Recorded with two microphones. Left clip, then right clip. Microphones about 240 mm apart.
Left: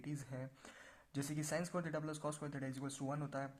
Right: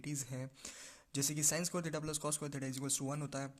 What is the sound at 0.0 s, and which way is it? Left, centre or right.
Speech, right.